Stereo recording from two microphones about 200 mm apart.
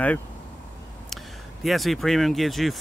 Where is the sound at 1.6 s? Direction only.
Centre (ahead or behind).